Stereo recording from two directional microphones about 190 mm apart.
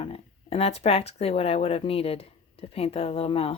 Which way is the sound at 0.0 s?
30° left (ahead or behind).